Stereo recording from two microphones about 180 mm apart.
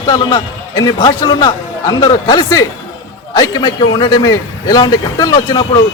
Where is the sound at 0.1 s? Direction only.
20° left (ahead or behind).